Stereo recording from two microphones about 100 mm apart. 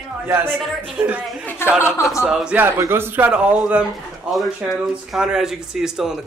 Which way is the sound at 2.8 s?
25° right (ahead or behind).